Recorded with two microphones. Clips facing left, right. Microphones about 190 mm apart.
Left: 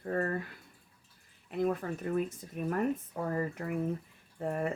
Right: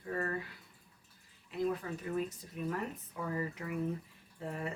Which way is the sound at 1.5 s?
55° left (ahead or behind).